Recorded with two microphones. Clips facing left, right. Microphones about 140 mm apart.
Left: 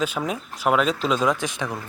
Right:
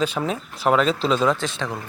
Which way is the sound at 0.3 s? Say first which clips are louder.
Right 2 dB; 5° left (ahead or behind).